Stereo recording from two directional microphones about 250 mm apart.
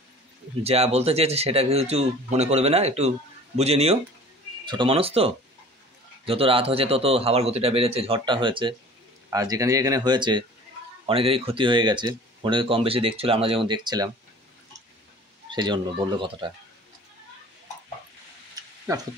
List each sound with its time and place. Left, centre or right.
0.7 s speech: right
15.5 s speech: centre
18.9 s speech: centre